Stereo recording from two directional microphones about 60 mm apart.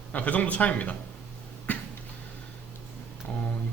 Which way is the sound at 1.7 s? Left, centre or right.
Left.